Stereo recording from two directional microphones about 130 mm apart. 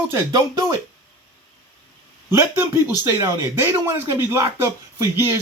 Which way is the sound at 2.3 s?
15° right (ahead or behind).